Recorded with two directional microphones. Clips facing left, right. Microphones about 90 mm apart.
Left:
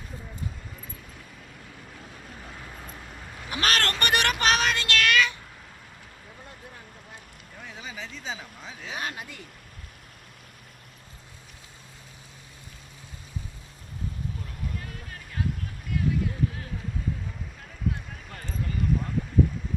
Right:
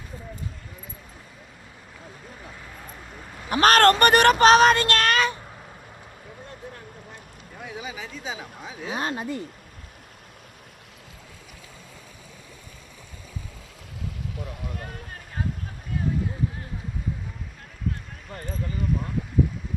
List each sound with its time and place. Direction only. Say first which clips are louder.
3.5 s speech: right 10 dB; 45° right (ahead or behind)
7.6 s speech: right 4 dB; 10° right (ahead or behind)
8.9 s speech: right 7 dB; 35° right (ahead or behind)
14.8 s boat: right 3 dB; 45° right (ahead or behind)
17.9 s basketball bounce: even; centre (ahead or behind)